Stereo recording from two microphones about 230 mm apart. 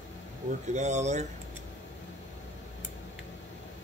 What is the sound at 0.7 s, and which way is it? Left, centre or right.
Speech, right.